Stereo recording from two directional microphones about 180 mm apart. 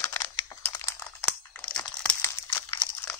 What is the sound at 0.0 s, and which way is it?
Crumpling, 20° left (ahead or behind).